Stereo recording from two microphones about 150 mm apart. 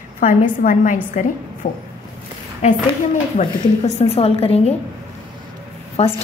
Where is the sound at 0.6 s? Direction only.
60° left (ahead or behind).